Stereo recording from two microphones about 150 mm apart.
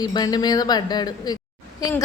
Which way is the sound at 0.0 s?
25° left (ahead or behind).